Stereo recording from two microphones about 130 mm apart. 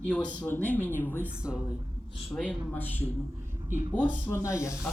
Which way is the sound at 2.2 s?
5° left (ahead or behind).